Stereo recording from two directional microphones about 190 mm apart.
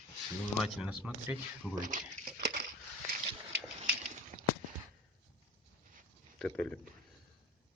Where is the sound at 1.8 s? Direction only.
45° right (ahead or behind).